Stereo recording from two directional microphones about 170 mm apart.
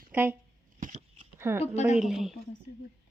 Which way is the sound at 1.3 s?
15° right (ahead or behind).